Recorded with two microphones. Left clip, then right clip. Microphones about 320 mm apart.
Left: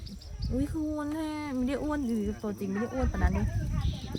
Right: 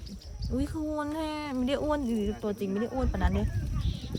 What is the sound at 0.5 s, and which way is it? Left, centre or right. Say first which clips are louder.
Speech: even; centre.